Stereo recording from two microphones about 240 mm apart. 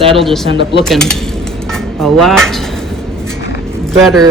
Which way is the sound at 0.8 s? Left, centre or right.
Centre.